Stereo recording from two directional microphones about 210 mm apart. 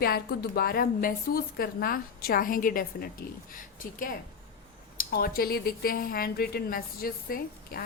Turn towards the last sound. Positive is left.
turn(degrees=45)  # may be behind; listen again after turning